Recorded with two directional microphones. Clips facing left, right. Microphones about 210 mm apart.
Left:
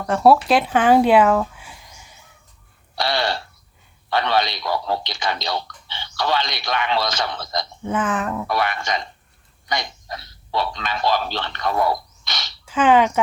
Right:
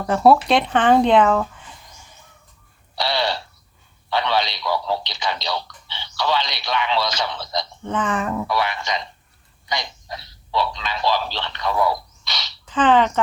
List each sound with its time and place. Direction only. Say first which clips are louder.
0.0 s speech: even; centre (ahead or behind)
2.9 s a sound: even; 50° left (ahead or behind)
4.1 s a man's voice: left 1 dB; 50° left (ahead or behind)
7.9 s speech: left 1 dB; 5° left (ahead or behind)
8.4 s speech: left 1 dB; 50° left (ahead or behind)
12.6 s speech: left 1 dB; 10° left (ahead or behind)